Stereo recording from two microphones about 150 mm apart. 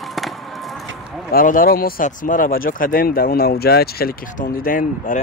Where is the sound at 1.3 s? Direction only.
70° left (ahead or behind).